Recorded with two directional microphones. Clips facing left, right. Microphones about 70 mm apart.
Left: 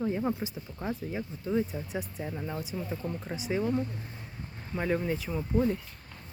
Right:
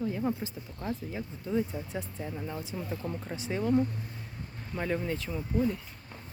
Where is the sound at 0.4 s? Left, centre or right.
Centre.